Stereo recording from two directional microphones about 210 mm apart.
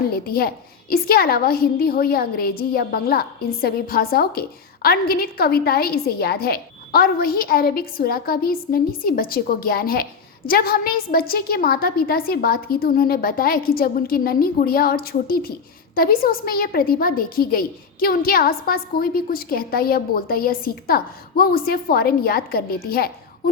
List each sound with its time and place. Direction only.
0.3 s a woman's voice: 45° left (ahead or behind)